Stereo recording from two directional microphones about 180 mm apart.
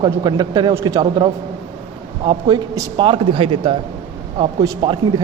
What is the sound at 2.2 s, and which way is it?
A man's voice, 25° right (ahead or behind).